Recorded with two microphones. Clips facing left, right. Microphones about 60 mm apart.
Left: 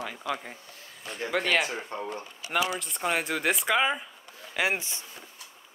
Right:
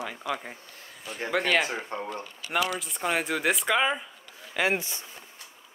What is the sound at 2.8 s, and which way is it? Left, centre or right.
Speech, centre.